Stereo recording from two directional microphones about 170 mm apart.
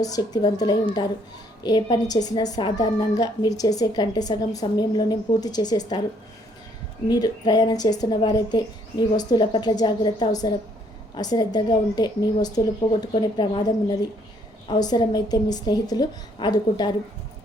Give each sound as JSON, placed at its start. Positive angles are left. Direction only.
{"t": 0.0, "sound": "speech", "side_deg": 25}
{"t": 7.1, "sound": "speech", "side_deg": 25}